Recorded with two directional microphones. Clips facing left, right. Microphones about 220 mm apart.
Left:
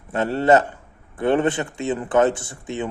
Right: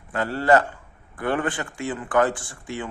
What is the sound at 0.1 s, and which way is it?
A man's voice, 25° left (ahead or behind).